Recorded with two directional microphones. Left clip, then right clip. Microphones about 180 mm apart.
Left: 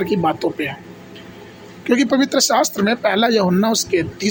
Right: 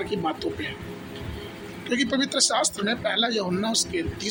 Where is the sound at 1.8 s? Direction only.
45° left (ahead or behind).